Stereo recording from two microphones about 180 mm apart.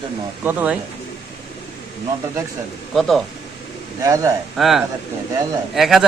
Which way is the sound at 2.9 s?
Centre (ahead or behind).